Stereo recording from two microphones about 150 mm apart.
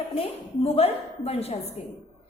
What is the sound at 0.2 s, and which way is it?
A woman's voice, 45° left (ahead or behind).